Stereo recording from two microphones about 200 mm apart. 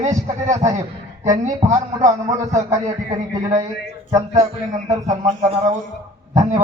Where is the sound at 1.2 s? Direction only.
15° right (ahead or behind).